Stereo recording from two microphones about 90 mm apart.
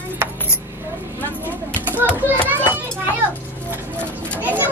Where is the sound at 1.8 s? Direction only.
20° right (ahead or behind).